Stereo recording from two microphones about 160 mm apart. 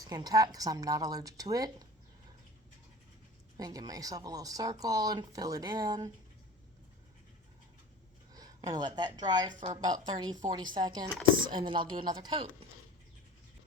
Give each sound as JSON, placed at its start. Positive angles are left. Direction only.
{"t": 0.0, "sound": "speech", "side_deg": -25}
{"t": 3.6, "sound": "speech", "side_deg": -25}
{"t": 8.3, "sound": "a woman's voice", "side_deg": -25}